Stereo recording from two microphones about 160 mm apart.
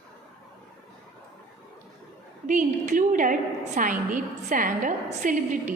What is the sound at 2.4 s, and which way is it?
A woman's voice, 50° right (ahead or behind).